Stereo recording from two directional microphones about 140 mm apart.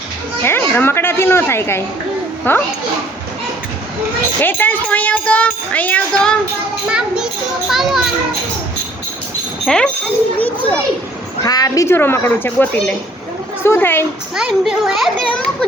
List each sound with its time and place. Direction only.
0.4 s speech: 15° left (ahead or behind)
4.4 s speech: 15° left (ahead or behind)
6.8 s a child's voice: 5° right (ahead or behind)
9.6 s a child's voice: 5° left (ahead or behind)
11.4 s speech: 25° left (ahead or behind)
14.3 s a child's voice: 5° right (ahead or behind)